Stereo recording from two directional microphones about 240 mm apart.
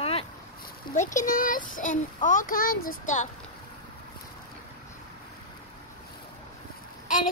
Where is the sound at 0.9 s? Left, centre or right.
Left.